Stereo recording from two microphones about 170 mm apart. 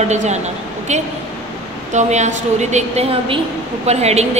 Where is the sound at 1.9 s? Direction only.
45° right (ahead or behind).